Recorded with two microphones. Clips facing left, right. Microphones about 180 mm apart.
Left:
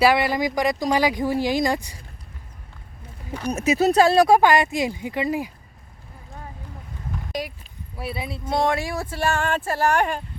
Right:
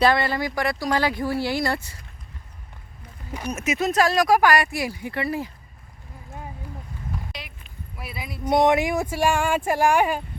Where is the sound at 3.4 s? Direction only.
35° left (ahead or behind); by 5.5 s 15° left (ahead or behind).